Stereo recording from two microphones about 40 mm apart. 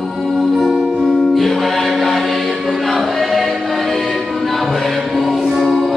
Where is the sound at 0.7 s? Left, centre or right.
Centre.